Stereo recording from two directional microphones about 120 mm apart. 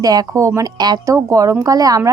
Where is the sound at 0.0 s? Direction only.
30° right (ahead or behind).